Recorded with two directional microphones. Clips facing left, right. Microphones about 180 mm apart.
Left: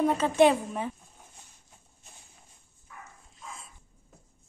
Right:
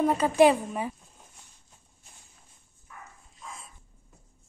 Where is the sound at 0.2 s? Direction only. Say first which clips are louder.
Right 2 dB; 5° right (ahead or behind).